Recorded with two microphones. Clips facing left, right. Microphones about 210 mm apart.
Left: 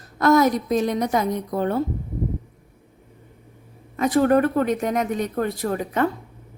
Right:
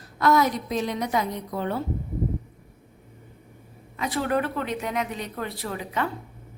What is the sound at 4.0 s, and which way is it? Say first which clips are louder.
A woman's voice: left 8 dB; 45° left (ahead or behind).